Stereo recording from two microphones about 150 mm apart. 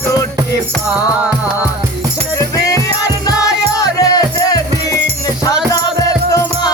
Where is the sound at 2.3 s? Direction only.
25° left (ahead or behind).